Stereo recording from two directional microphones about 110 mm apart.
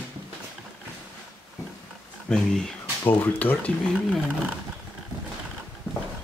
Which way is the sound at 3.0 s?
15° left (ahead or behind).